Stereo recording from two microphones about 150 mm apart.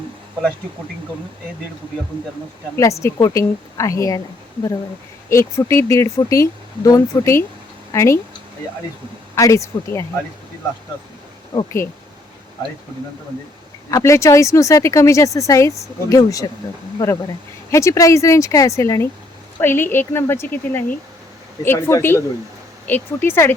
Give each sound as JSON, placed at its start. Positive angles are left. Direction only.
{"t": 2.7, "sound": "speech", "side_deg": 20}
{"t": 5.3, "sound": "speech", "side_deg": 20}
{"t": 9.3, "sound": "speech", "side_deg": 20}
{"t": 13.9, "sound": "a woman's voice", "side_deg": 20}